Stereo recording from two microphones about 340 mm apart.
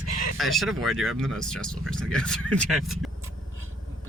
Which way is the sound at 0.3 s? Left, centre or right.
Centre.